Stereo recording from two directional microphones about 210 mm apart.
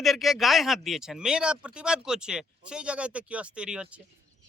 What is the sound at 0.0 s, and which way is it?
Speech, centre (ahead or behind).